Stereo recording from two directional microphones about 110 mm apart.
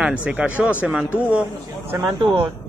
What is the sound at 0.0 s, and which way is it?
Speech, 10° right (ahead or behind).